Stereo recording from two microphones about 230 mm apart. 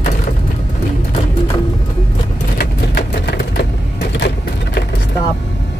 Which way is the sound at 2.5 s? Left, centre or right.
Left.